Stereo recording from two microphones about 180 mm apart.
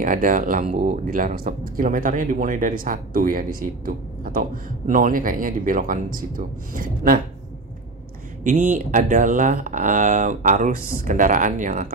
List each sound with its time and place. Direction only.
0.0 s speech: 50° right (ahead or behind)
8.5 s speech: 45° right (ahead or behind)